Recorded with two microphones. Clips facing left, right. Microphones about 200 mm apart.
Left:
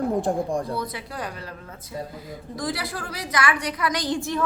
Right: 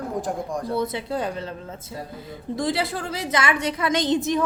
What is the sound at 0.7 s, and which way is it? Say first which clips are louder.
Speech: right 5 dB; 25° right (ahead or behind).